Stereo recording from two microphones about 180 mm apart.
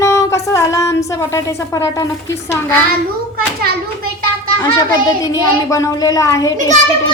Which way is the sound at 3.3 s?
55° right (ahead or behind).